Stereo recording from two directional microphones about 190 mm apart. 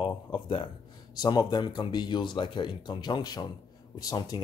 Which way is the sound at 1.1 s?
20° left (ahead or behind).